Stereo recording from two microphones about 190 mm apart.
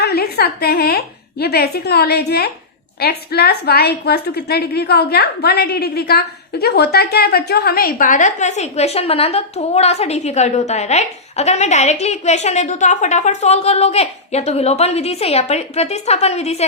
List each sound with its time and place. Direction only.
0.0 s a woman's voice: 55° left (ahead or behind); by 16.6 s 35° left (ahead or behind)